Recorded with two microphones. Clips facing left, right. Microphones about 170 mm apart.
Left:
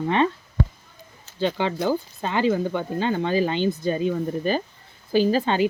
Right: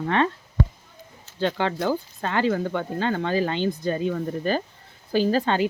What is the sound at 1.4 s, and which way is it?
Speech, 10° left (ahead or behind).